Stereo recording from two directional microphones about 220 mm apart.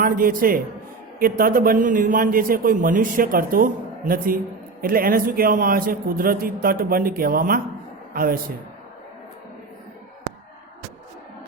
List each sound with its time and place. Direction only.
0.0 s a man's voice: 40° right (ahead or behind)